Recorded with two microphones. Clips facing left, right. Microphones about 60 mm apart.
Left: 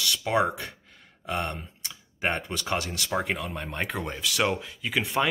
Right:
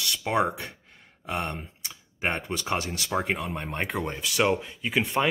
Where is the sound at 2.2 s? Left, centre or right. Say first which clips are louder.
Even; centre.